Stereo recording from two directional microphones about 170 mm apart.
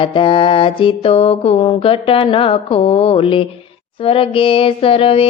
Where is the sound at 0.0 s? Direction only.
30° left (ahead or behind).